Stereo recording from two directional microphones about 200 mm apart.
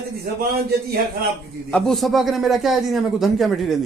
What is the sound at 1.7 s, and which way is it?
A man's voice, centre (ahead or behind).